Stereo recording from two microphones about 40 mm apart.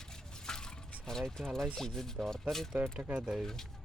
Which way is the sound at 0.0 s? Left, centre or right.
Centre.